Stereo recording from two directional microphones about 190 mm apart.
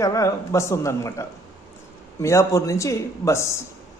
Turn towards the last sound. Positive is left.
turn(degrees=15)  # may be behind; listen again after turning